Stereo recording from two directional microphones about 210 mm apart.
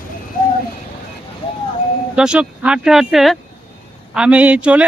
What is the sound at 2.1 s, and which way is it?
Speech, 5° right (ahead or behind).